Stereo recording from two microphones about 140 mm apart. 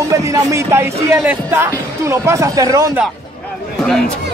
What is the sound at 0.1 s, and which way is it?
Speech, 20° right (ahead or behind).